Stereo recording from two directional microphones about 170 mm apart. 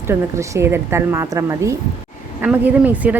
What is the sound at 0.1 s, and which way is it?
A woman's voice, 15° right (ahead or behind).